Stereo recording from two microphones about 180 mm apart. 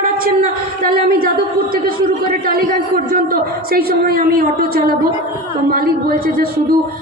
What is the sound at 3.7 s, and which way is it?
A woman's voice, 55° right (ahead or behind).